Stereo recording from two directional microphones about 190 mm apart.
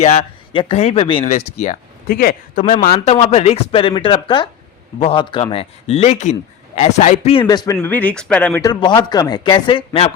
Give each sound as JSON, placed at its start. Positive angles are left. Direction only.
{"t": 0.0, "sound": "speech", "side_deg": 30}
{"t": 2.0, "sound": "speech", "side_deg": 50}
{"t": 2.9, "sound": "speech", "side_deg": 35}
{"t": 7.3, "sound": "speech", "side_deg": 20}
{"t": 7.8, "sound": "speech", "side_deg": 10}
{"t": 8.6, "sound": "speech", "side_deg": 20}